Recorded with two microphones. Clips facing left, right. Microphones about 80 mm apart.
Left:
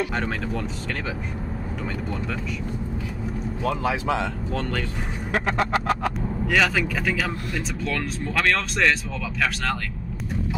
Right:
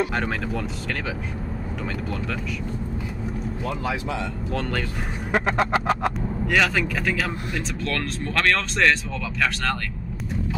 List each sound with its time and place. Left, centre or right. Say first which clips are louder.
0.1 s speech: right 1 dB; centre
3.6 s speech: left 5 dB; left
4.6 s speech: right 1 dB; centre
5.3 s a sound: right 2 dB; centre
6.4 s speech: even; centre